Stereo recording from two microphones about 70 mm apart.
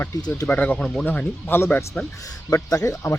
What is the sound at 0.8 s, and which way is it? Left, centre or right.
Speech, centre.